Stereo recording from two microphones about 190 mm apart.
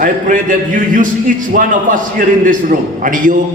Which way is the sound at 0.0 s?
45° right (ahead or behind).